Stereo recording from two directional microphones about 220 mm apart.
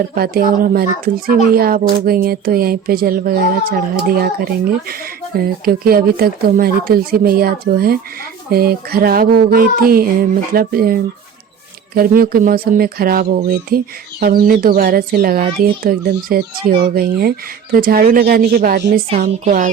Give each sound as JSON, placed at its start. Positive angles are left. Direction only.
{"t": 0.1, "sound": "a child's voice", "side_deg": -40}